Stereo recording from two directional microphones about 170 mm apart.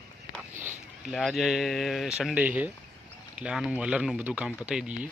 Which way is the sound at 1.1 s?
Centre (ahead or behind).